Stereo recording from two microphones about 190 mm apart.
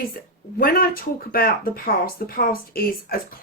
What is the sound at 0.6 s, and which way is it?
Speech, 50° left (ahead or behind).